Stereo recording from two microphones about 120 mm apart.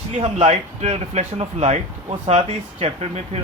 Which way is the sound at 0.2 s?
65° right (ahead or behind).